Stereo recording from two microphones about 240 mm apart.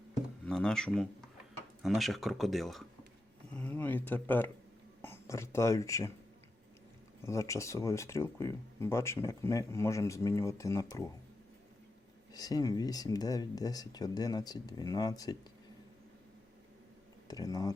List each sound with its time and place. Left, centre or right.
0.4 s speech: centre
7.3 s speech: centre
12.3 s speech: centre
17.2 s speech: centre